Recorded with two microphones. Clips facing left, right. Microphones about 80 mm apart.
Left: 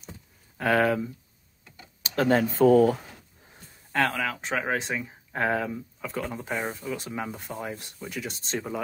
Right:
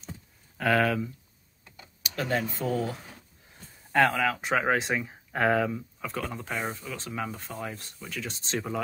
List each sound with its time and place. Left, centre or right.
0.6 s speech: centre
2.0 s speech: left
3.9 s speech: centre
8.3 s speech: centre